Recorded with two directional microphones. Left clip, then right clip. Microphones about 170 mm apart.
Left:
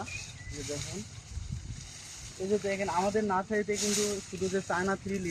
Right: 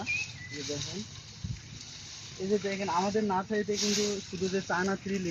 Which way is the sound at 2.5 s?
5° left (ahead or behind).